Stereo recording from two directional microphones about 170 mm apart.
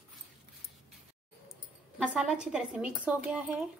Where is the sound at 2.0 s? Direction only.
5° right (ahead or behind).